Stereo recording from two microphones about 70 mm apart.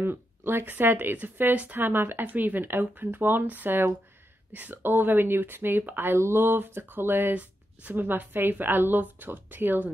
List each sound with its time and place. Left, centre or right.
0.5 s speech: right